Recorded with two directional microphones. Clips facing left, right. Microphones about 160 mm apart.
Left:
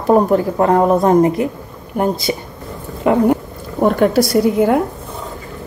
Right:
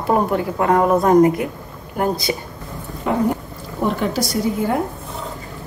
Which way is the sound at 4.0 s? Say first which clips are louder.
Left 8 dB; 60° left (ahead or behind).